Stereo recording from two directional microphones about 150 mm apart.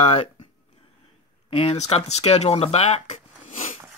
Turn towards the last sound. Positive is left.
turn(degrees=50)  # may be behind; listen again after turning